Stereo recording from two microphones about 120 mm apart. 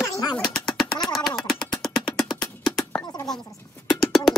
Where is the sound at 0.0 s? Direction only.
35° left (ahead or behind).